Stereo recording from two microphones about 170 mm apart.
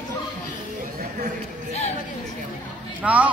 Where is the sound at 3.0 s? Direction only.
10° right (ahead or behind).